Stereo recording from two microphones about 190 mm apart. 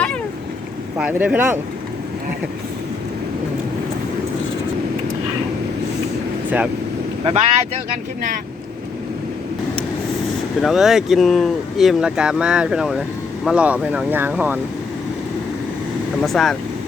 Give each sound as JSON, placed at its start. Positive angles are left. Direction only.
{"t": 0.9, "sound": "speech", "side_deg": -5}
{"t": 7.3, "sound": "speech", "side_deg": -30}
{"t": 10.6, "sound": "speech", "side_deg": 0}
{"t": 16.2, "sound": "speech", "side_deg": 0}